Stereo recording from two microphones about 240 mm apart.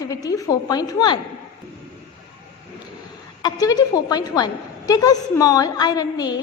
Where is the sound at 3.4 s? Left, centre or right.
Centre.